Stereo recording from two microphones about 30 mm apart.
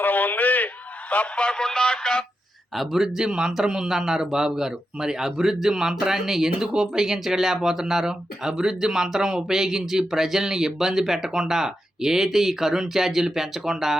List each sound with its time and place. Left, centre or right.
0.0 s a sound: left
1.4 s speech: left
2.7 s speech: centre